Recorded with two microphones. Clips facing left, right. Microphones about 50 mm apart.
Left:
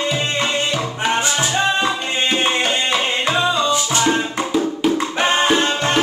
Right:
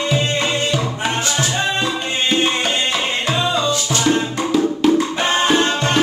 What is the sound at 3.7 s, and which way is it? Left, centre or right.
Music, centre.